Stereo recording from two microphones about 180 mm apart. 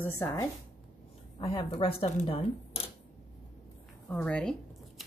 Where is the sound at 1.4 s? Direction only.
25° left (ahead or behind).